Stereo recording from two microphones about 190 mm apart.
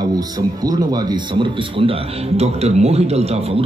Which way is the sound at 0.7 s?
20° right (ahead or behind).